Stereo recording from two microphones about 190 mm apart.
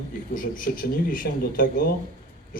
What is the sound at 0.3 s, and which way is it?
Speech, 45° left (ahead or behind).